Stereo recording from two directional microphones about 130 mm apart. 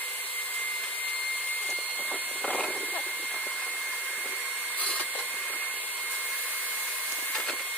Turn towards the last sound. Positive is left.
turn(degrees=5)  # may be behind; listen again after turning